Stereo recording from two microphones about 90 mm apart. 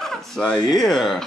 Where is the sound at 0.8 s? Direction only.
5° left (ahead or behind).